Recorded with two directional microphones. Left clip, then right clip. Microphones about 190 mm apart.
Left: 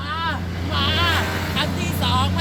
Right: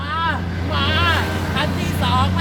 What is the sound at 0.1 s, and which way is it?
Vehicle, centre (ahead or behind).